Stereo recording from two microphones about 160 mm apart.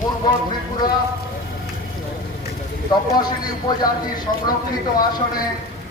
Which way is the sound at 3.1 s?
25° left (ahead or behind).